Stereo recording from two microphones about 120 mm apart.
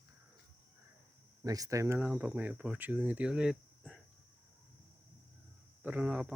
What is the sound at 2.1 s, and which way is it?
Speech, 10° right (ahead or behind).